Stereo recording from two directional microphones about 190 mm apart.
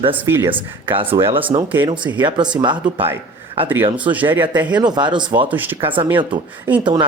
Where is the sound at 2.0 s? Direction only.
10° right (ahead or behind).